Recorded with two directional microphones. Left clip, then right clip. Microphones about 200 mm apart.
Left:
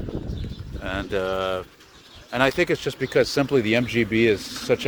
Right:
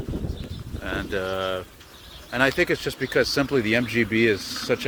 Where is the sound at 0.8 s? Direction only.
15° left (ahead or behind).